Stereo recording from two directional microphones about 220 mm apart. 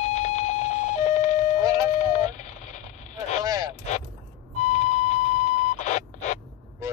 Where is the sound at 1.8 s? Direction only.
35° left (ahead or behind).